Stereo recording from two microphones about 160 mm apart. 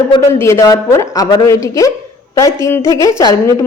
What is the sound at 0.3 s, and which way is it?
A woman's voice, 15° left (ahead or behind).